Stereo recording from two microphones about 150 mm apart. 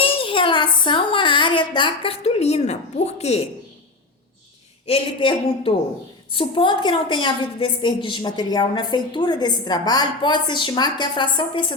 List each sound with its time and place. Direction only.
0.0 s a sound: 35° left (ahead or behind)
0.9 s a woman's voice: 35° left (ahead or behind)
4.9 s a woman's voice: 35° left (ahead or behind)